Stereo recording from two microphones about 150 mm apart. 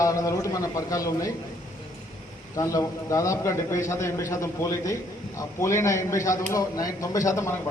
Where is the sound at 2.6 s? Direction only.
20° left (ahead or behind).